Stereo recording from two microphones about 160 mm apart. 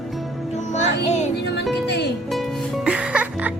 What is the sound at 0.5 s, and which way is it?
Music, 45° left (ahead or behind).